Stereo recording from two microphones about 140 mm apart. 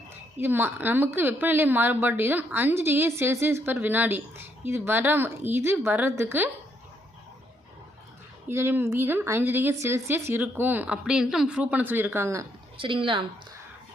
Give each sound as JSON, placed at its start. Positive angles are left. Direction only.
{"t": 0.3, "sound": "a woman's voice", "side_deg": -15}
{"t": 8.4, "sound": "a woman's voice", "side_deg": -15}
{"t": 12.8, "sound": "a woman's voice", "side_deg": -40}